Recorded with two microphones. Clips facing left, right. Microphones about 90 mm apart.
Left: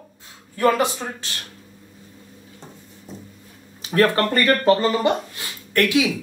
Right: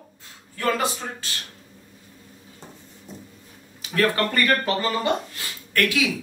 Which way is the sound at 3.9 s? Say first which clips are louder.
Left 4 dB; 30° left (ahead or behind).